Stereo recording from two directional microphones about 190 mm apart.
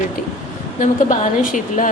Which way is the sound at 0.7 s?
40° left (ahead or behind).